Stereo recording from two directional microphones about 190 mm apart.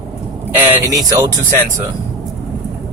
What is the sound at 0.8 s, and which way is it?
Speech, 20° right (ahead or behind).